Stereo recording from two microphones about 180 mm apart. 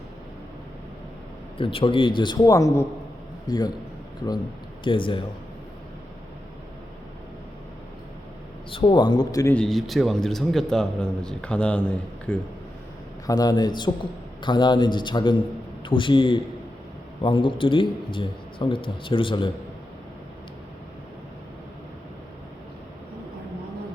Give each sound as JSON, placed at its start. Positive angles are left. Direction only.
{"t": 1.5, "sound": "a man's voice", "side_deg": 30}
{"t": 4.8, "sound": "a man's voice", "side_deg": 30}
{"t": 8.7, "sound": "a man's voice", "side_deg": 30}
{"t": 9.6, "sound": "a man's voice", "side_deg": 0}
{"t": 13.2, "sound": "a man's voice", "side_deg": 20}